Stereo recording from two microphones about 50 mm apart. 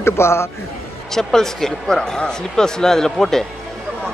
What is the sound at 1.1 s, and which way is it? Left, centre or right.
Speech, centre.